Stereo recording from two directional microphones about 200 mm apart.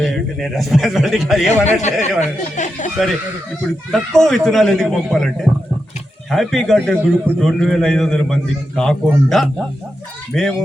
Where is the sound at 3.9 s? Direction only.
5° left (ahead or behind).